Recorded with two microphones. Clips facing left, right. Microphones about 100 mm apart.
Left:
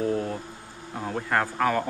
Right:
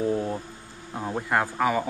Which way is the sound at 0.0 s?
20° right (ahead or behind).